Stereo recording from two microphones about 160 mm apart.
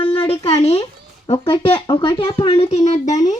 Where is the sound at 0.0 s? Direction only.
35° left (ahead or behind).